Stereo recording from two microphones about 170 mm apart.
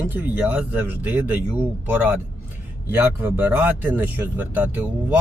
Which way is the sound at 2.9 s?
10° right (ahead or behind).